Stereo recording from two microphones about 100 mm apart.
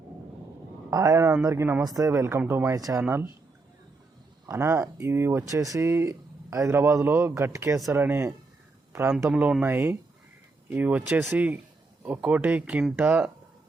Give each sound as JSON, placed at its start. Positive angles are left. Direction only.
{"t": 0.9, "sound": "a man's voice", "side_deg": -35}
{"t": 2.7, "sound": "speech", "side_deg": -35}
{"t": 3.0, "sound": "speech", "side_deg": -25}
{"t": 4.4, "sound": "speech", "side_deg": -25}
{"t": 9.3, "sound": "speech", "side_deg": -10}